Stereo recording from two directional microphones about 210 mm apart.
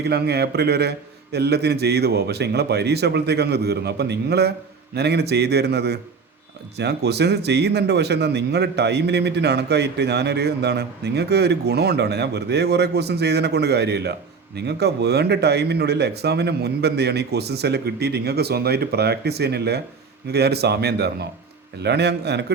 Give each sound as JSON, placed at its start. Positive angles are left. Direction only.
{"t": 0.0, "sound": "speech", "side_deg": -50}